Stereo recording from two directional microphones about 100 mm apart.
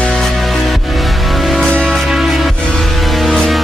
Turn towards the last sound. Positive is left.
turn(degrees=0)  # may be behind; listen again after turning